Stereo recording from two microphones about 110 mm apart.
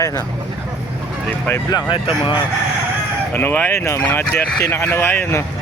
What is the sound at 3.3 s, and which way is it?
Speech, 20° left (ahead or behind).